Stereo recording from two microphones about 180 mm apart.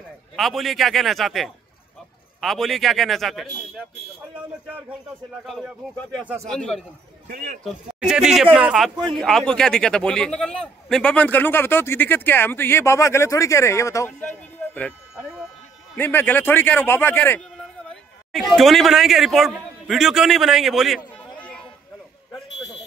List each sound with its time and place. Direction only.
0.4 s a man's voice: centre (ahead or behind)
5.4 s a man's voice: centre (ahead or behind)
7.2 s a man's voice: 60° right (ahead or behind)
7.6 s a man's voice: 5° right (ahead or behind)
16.0 s speech: 10° left (ahead or behind)